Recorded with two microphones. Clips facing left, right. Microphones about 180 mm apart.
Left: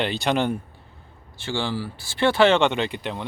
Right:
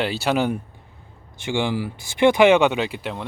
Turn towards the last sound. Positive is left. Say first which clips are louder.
# right 1 dB
turn(degrees=-5)  # may be behind; listen again after turning